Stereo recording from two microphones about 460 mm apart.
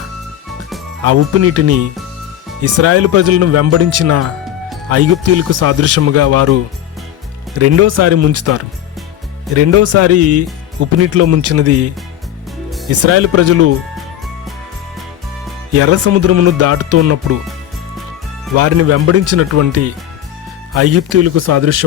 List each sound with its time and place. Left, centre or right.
1.0 s speech: right
7.6 s speech: right
12.9 s speech: right
15.8 s speech: right
18.5 s speech: right